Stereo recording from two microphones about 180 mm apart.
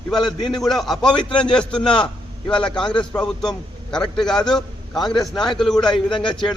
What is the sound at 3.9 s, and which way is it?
Speech, 5° left (ahead or behind).